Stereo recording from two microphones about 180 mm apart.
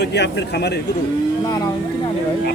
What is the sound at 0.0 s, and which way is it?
Speech, 70° left (ahead or behind).